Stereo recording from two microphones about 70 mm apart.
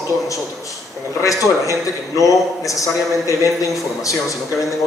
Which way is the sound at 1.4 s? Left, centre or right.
Left.